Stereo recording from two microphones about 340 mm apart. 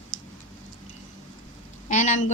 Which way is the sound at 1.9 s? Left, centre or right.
Left.